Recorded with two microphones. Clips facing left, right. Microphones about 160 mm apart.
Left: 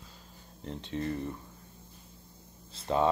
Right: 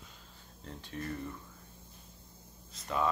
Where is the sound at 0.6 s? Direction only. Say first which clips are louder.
Left 7 dB; 20° left (ahead or behind).